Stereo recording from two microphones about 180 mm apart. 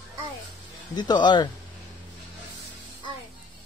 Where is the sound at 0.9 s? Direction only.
25° left (ahead or behind).